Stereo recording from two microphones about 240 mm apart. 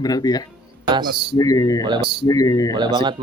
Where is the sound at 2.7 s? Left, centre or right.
Centre.